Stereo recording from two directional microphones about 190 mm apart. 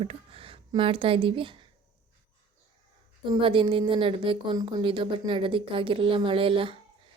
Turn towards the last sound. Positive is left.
turn(degrees=-30)  # may be behind; listen again after turning